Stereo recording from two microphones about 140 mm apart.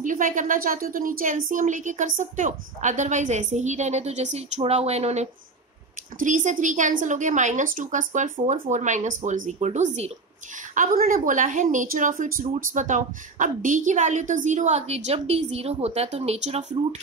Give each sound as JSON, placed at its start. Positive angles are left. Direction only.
{"t": 0.0, "sound": "speech", "side_deg": -70}
{"t": 6.1, "sound": "speech", "side_deg": -65}
{"t": 10.7, "sound": "speech", "side_deg": -70}